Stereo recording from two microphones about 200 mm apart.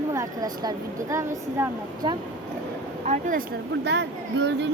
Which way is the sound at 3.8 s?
60° right (ahead or behind).